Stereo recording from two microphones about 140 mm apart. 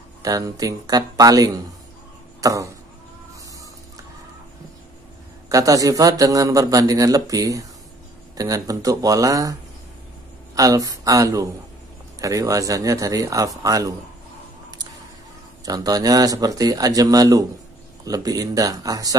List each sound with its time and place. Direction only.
0.2 s a man's voice: 25° right (ahead or behind)
5.5 s a man's voice: 25° right (ahead or behind)
15.6 s a man's voice: 25° right (ahead or behind)